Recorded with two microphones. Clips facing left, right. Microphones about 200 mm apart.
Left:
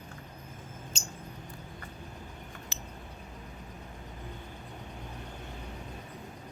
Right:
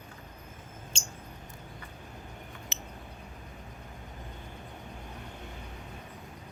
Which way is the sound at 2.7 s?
20° right (ahead or behind).